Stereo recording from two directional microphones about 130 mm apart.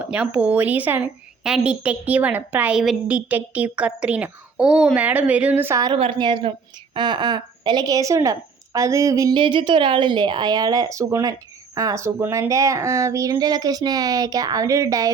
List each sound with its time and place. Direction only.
0.0 s a woman's voice: 10° right (ahead or behind)
6.0 s a woman's voice: 40° right (ahead or behind); by 9.3 s 25° right (ahead or behind)
9.3 s speech: 40° right (ahead or behind)